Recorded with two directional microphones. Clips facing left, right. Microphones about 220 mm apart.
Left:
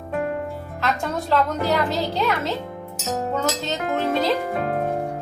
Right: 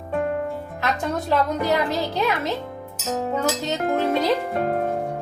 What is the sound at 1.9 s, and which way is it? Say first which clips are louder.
Speech: even; 15° right (ahead or behind).